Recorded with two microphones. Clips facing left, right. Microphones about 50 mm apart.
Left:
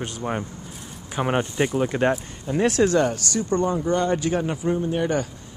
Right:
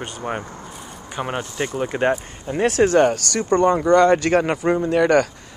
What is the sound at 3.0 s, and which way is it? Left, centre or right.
Speech, right.